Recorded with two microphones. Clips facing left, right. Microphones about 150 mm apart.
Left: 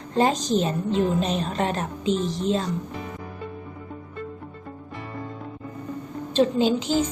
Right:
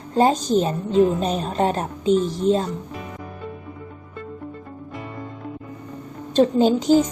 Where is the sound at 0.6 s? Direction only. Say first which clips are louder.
Right 5 dB; 40° right (ahead or behind).